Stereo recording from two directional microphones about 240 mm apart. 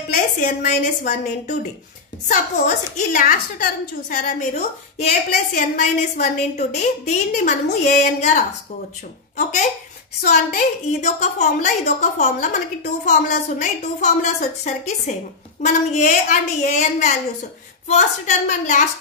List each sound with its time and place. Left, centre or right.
0.4 s a woman's voice: left
10.2 s a woman's voice: left